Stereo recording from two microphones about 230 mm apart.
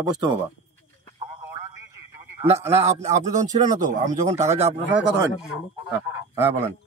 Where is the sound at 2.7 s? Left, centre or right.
Right.